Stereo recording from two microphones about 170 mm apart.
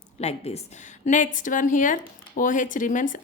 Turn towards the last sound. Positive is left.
turn(degrees=50)  # may be behind; listen again after turning